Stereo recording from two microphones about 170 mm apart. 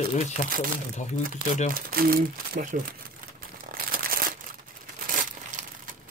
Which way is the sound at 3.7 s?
55° right (ahead or behind).